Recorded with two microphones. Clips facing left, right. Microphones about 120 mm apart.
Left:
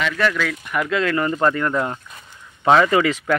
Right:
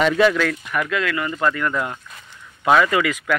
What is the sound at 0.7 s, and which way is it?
Speech, 25° left (ahead or behind).